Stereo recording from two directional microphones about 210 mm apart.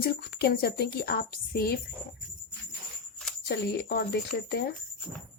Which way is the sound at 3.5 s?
50° left (ahead or behind).